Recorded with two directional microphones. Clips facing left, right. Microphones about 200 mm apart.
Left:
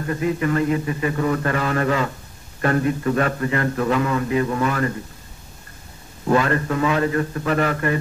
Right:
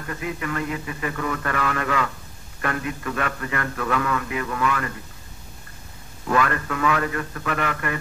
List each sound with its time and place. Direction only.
0.0 s a man's voice: 30° left (ahead or behind)
6.2 s a man's voice: 30° left (ahead or behind)